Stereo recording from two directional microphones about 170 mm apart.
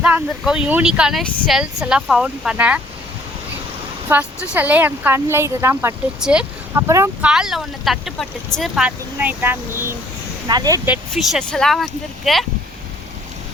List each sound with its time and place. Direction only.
0.0 s speech: 5° right (ahead or behind)
4.1 s speech: 5° right (ahead or behind)
6.1 s speech: 5° right (ahead or behind)
6.7 s speech: 15° right (ahead or behind)
7.3 s speech: 5° right (ahead or behind); by 10.8 s 20° right (ahead or behind)
11.1 s speech: centre (ahead or behind)